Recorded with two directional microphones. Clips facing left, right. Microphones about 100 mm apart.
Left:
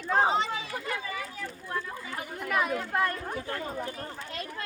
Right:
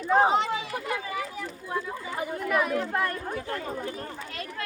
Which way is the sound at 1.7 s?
15° right (ahead or behind).